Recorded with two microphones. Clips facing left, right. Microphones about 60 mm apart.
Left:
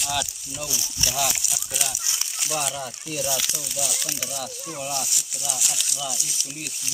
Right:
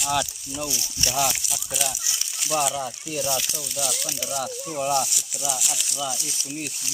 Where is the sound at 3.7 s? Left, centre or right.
Centre.